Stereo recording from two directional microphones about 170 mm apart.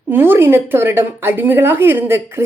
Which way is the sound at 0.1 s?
10° right (ahead or behind).